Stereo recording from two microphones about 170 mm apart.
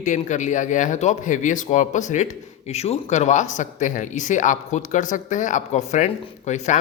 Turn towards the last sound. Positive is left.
turn(degrees=45)  # may be behind; listen again after turning